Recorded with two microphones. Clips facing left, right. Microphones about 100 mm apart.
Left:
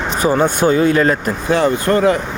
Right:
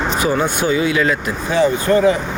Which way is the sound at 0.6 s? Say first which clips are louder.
Left 4 dB; 45° left (ahead or behind).